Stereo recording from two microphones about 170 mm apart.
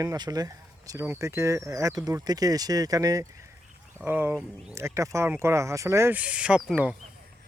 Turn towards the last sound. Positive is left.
turn(degrees=-5)  # may be behind; listen again after turning